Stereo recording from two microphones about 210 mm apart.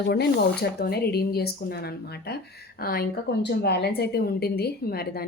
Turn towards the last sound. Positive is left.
turn(degrees=45)  # may be behind; listen again after turning